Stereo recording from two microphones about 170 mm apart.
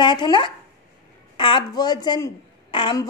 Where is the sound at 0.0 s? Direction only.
25° left (ahead or behind).